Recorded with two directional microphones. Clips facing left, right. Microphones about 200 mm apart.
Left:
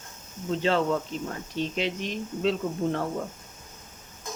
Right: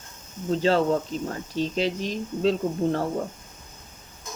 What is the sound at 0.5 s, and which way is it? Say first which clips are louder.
Speech: right 3 dB; 35° right (ahead or behind).